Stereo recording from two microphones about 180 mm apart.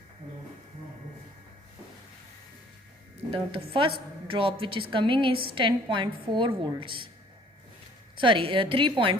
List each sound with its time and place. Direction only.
3.2 s a woman's voice: 30° right (ahead or behind)
8.2 s a woman's voice: 30° right (ahead or behind)